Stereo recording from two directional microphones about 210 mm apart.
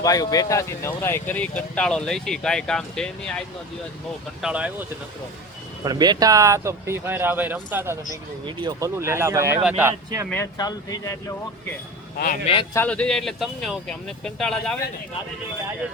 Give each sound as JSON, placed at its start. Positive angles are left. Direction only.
{"t": 0.0, "sound": "speech", "side_deg": 15}
{"t": 4.4, "sound": "speech", "side_deg": -5}
{"t": 5.8, "sound": "speech", "side_deg": -20}
{"t": 10.2, "sound": "speech", "side_deg": 10}
{"t": 12.1, "sound": "speech", "side_deg": 45}
{"t": 12.7, "sound": "speech", "side_deg": 5}